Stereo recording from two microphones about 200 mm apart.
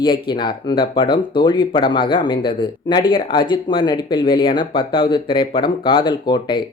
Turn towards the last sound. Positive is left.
turn(degrees=20)  # may be behind; listen again after turning